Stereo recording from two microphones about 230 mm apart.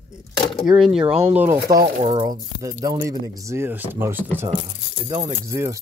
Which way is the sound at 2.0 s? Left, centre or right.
Right.